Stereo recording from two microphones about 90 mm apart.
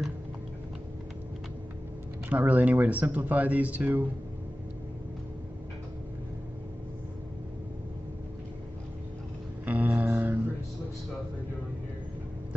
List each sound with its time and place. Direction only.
2.2 s speech: 20° right (ahead or behind)
9.7 s music: 15° right (ahead or behind)